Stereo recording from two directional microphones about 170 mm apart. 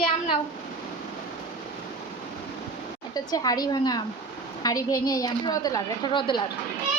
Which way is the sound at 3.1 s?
20° left (ahead or behind).